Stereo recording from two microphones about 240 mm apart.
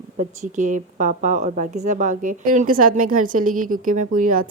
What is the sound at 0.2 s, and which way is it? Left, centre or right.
A woman's voice, right.